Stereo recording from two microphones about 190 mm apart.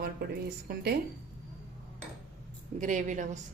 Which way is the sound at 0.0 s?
55° right (ahead or behind).